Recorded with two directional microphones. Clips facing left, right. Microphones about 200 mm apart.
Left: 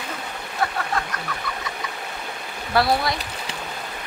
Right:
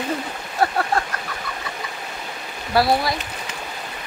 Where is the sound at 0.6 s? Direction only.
40° right (ahead or behind).